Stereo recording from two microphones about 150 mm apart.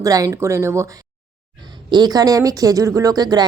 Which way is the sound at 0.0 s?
25° right (ahead or behind).